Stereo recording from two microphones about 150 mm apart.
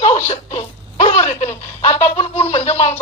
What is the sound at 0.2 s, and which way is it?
Speech, 50° left (ahead or behind).